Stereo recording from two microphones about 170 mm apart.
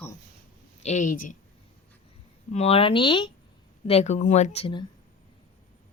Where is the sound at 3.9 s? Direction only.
40° left (ahead or behind).